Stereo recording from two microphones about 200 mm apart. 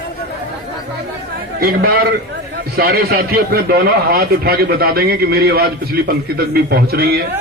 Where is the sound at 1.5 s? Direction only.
50° right (ahead or behind).